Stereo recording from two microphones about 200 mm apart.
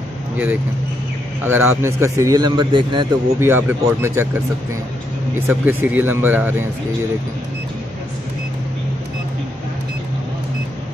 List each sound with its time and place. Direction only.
1.4 s a man's voice: 10° right (ahead or behind)
3.3 s a man's voice: 10° right (ahead or behind)
5.5 s a man's voice: 10° right (ahead or behind)